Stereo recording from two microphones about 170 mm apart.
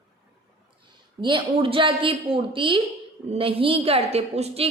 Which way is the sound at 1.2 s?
30° right (ahead or behind).